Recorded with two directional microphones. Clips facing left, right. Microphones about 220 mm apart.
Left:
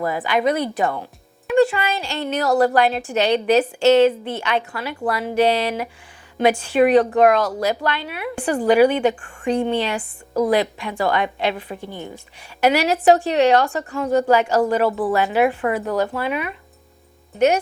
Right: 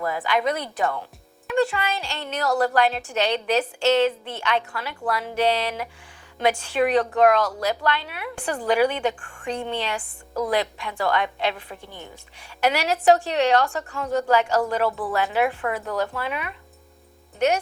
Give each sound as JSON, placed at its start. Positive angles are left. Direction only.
{"t": 0.0, "sound": "a woman's voice", "side_deg": 15}
{"t": 14.8, "sound": "speech", "side_deg": 30}
{"t": 15.1, "sound": "a woman's voice", "side_deg": 10}